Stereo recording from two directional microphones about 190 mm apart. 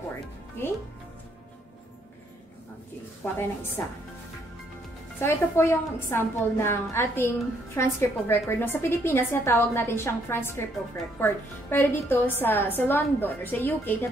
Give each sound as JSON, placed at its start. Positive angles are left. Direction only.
{"t": 3.3, "sound": "a woman's voice", "side_deg": 10}
{"t": 5.2, "sound": "a woman's voice", "side_deg": 15}